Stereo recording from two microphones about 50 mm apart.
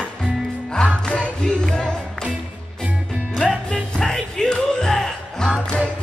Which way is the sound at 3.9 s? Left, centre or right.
Centre.